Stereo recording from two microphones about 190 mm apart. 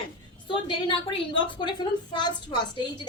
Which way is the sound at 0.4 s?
25° left (ahead or behind).